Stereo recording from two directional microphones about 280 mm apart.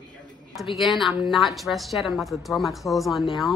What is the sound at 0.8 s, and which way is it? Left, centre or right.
A woman's voice, centre.